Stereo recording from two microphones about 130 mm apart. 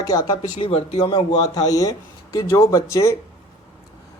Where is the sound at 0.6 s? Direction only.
45° left (ahead or behind).